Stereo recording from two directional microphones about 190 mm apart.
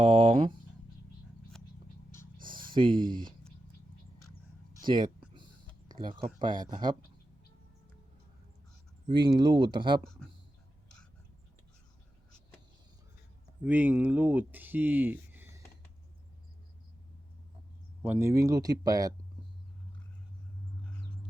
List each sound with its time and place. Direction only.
0.0 s speech: 25° right (ahead or behind)
1.5 s a sound: 5° left (ahead or behind)
2.4 s a sound: 45° right (ahead or behind)
2.7 s speech: 25° right (ahead or behind)
4.9 s speech: 25° right (ahead or behind)
6.1 s speech: 25° right (ahead or behind)
9.0 s speech: 25° right (ahead or behind)
13.7 s speech: 10° right (ahead or behind)
18.0 s speech: 10° right (ahead or behind)